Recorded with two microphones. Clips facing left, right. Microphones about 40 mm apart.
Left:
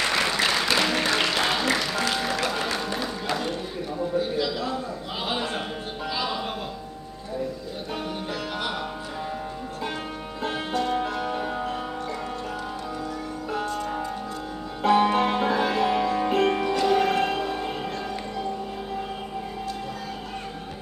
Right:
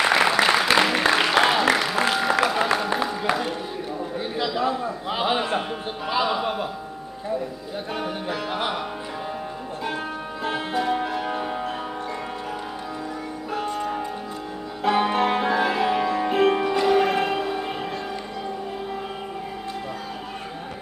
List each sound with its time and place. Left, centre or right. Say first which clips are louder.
0.0 s music: right 5 dB; centre
4.6 s a sound: right 5 dB; right
6.2 s music: right 5 dB; centre
7.9 s music: right 3 dB; centre
10.4 s music: right 2 dB; centre
14.8 s music: left 1 dB; centre